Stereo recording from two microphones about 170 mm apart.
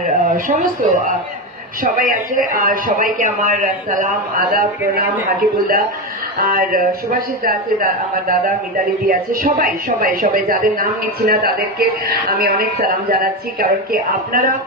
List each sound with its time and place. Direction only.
0.6 s a woman's voice: 55° right (ahead or behind)